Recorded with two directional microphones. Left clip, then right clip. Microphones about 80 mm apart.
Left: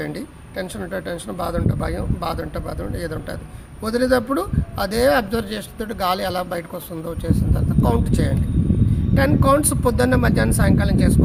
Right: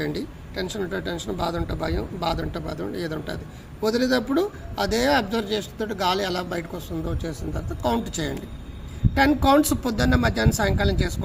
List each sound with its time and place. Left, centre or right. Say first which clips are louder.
0.0 s speech: even; left
7.8 s speech: left 4 dB; left